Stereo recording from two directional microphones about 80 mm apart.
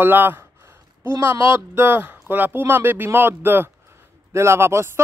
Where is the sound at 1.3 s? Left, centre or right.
Right.